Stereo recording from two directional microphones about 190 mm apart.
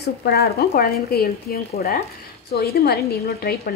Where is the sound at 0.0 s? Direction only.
55° left (ahead or behind).